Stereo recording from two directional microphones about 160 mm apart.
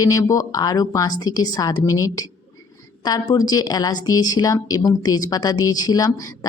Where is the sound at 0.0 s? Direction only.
20° left (ahead or behind).